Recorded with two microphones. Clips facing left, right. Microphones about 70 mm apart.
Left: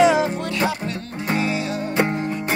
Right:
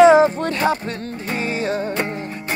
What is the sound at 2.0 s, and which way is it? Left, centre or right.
Music, left.